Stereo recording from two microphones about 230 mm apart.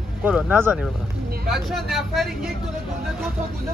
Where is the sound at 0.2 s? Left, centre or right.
Centre.